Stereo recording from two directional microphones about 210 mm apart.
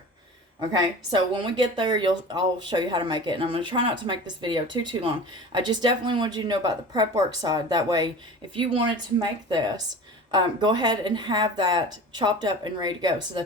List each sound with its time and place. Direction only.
1.1 s speech: 20° right (ahead or behind)